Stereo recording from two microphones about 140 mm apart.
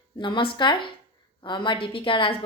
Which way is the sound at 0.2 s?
35° left (ahead or behind).